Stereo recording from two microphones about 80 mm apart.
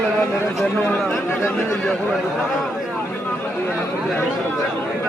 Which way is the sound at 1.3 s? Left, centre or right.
Left.